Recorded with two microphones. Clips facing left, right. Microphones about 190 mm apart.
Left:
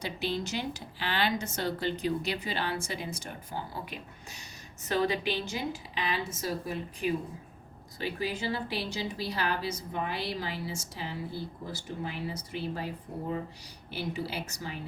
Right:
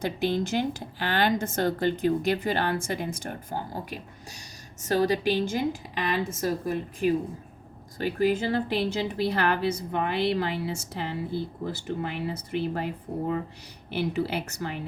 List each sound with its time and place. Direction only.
0.0 s a woman's voice: 50° right (ahead or behind)